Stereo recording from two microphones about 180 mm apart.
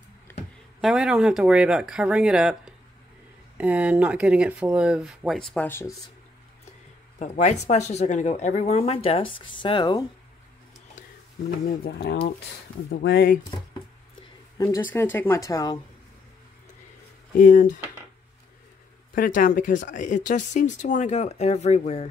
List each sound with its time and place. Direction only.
0.7 s speech: 5° right (ahead or behind); by 5.9 s 15° left (ahead or behind)
7.2 s speech: 40° left (ahead or behind); by 10.0 s 25° left (ahead or behind)
11.6 s speech: 60° left (ahead or behind)
14.6 s speech: 15° left (ahead or behind)
17.4 s speech: 45° left (ahead or behind)
19.1 s speech: 50° left (ahead or behind)